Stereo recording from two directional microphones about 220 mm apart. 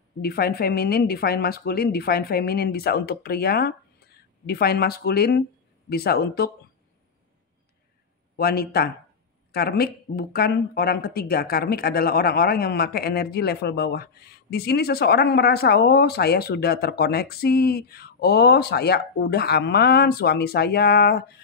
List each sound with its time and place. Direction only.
0.2 s speech: 45° left (ahead or behind)
8.4 s speech: 45° left (ahead or behind)